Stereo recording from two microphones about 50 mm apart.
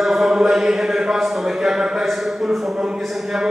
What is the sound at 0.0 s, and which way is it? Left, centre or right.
Speech, centre.